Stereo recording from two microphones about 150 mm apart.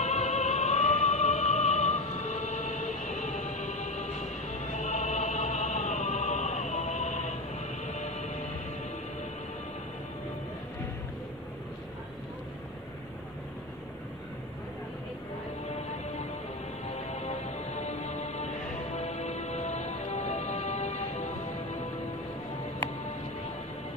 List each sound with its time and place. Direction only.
0.0 s music: 50° left (ahead or behind)
16.9 s music: 50° left (ahead or behind)